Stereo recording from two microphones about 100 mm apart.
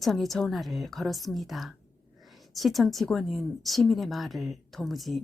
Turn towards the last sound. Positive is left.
turn(degrees=0)  # may be behind; listen again after turning